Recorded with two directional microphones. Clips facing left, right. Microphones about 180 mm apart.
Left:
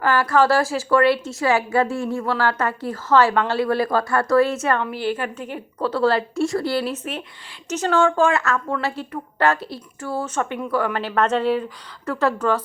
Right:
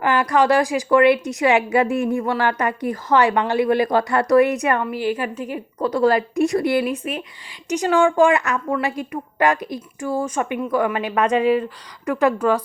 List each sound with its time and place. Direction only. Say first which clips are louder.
0.0 s a woman's voice: even; 15° right (ahead or behind)